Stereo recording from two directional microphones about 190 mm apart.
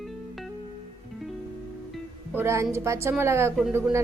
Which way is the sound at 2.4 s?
15° right (ahead or behind).